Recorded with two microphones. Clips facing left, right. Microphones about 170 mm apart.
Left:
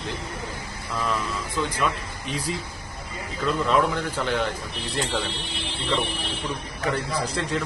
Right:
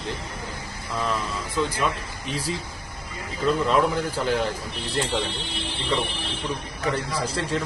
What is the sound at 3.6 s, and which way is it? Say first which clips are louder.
Speech: left 2 dB; 5° right (ahead or behind).